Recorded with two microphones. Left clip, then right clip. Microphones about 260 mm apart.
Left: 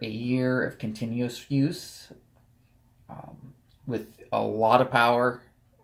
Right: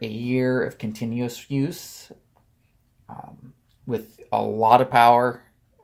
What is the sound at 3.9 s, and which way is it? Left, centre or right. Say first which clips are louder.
Speech: right 4 dB; right.